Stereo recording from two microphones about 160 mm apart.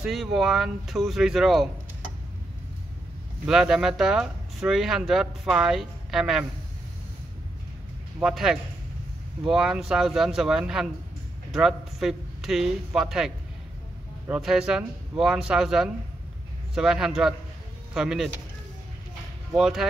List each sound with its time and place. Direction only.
0.0 s speech: centre (ahead or behind)
3.4 s speech: 5° right (ahead or behind)
8.2 s speech: 5° right (ahead or behind)
19.5 s speech: centre (ahead or behind)